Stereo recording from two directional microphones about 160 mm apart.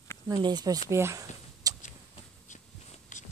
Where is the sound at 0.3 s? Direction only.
25° right (ahead or behind).